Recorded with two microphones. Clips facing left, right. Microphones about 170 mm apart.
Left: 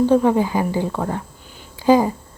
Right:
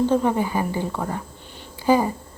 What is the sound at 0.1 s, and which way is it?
Speech, 15° left (ahead or behind).